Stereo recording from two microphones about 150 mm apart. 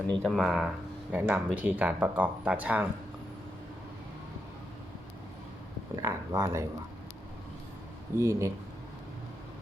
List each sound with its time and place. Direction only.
0.1 s speech: 5° left (ahead or behind)
1.1 s speech: 15° right (ahead or behind)
6.0 s speech: 20° right (ahead or behind)
8.1 s speech: 20° right (ahead or behind)